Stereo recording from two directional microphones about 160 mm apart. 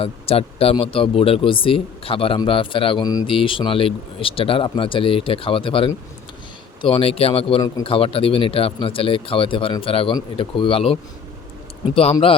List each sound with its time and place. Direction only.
0.0 s speech: 35° left (ahead or behind)